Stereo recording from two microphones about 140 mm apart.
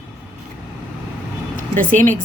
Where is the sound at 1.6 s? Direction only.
70° right (ahead or behind).